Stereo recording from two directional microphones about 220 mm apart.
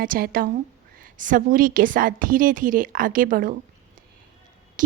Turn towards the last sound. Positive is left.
turn(degrees=-40)  # may be behind; listen again after turning